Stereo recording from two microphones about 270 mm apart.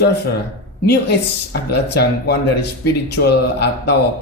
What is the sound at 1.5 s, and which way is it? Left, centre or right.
Speech, left.